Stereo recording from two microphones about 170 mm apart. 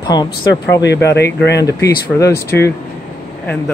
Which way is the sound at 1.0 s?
80° left.